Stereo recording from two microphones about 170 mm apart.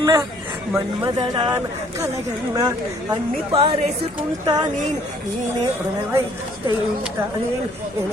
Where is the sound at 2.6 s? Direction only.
20° right (ahead or behind).